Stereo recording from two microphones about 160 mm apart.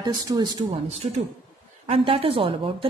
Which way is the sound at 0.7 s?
40° right (ahead or behind).